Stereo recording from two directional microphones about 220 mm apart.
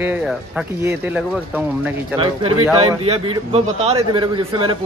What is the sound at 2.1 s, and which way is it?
Speech, 25° right (ahead or behind).